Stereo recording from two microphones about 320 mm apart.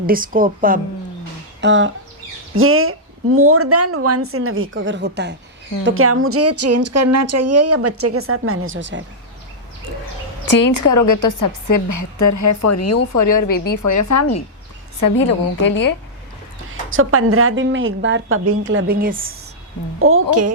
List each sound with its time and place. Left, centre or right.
0.0 s a woman's voice: right
10.5 s a woman's voice: left
13.1 s a woman's voice: left
15.0 s a woman's voice: left
16.9 s a woman's voice: right
20.0 s a woman's voice: right